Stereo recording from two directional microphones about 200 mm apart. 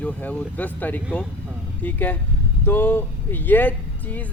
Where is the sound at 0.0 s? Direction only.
10° left (ahead or behind).